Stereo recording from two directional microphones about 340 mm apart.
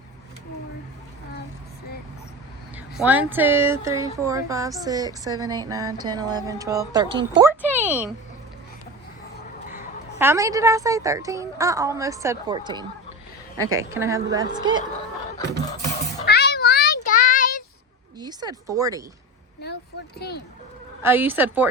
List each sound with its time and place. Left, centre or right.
3.0 s speech: centre
10.2 s speech: centre
16.2 s child singing: left
18.2 s speech: centre
20.1 s speech: left
21.0 s a woman's voice: centre